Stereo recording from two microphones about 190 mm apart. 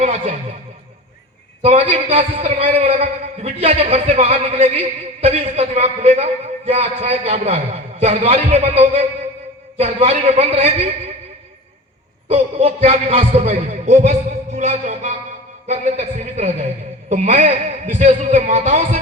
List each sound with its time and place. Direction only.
1.6 s a man's voice: 30° right (ahead or behind)
12.3 s a man's voice: 35° right (ahead or behind)